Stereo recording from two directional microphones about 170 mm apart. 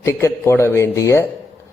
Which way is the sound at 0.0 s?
15° left (ahead or behind).